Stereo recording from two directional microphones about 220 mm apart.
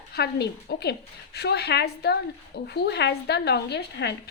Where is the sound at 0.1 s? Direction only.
45° left (ahead or behind).